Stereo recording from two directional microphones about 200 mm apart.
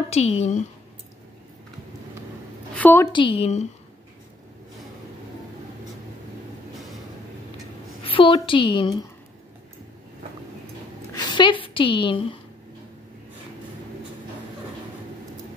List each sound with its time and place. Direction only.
0.1 s speech: 35° left (ahead or behind)
2.7 s a woman's voice: 10° left (ahead or behind)
3.1 s a woman's voice: 25° left (ahead or behind)
8.0 s a woman's voice: 25° left (ahead or behind)
11.1 s a woman's voice: 20° left (ahead or behind)